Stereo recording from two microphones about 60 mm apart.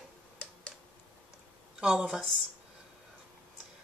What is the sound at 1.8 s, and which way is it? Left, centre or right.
Speech, centre.